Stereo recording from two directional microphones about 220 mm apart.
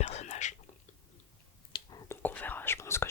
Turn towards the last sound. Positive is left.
turn(degrees=10)  # may be behind; listen again after turning